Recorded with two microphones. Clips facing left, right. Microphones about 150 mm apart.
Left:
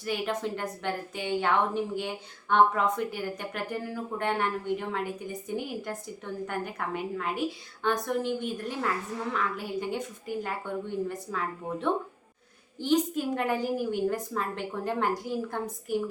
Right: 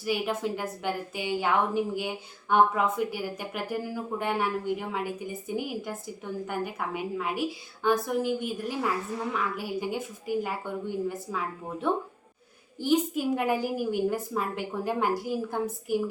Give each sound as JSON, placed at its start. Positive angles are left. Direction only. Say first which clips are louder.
{"t": 0.0, "sound": "a woman's voice", "louder": "right 2 dB", "side_deg": -5}